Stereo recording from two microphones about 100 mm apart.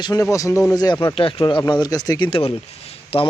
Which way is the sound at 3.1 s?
75° left (ahead or behind).